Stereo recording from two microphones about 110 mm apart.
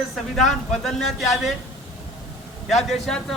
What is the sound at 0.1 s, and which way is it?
A man's voice, centre (ahead or behind).